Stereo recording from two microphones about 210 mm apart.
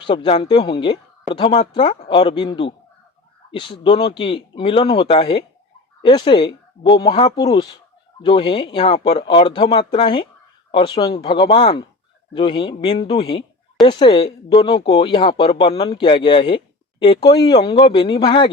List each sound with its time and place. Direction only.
0.0 s speech: 25° left (ahead or behind)